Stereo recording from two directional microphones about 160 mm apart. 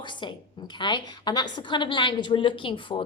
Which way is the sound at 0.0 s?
30° left (ahead or behind).